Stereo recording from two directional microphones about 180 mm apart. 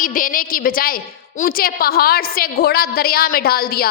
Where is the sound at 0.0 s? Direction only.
50° left (ahead or behind).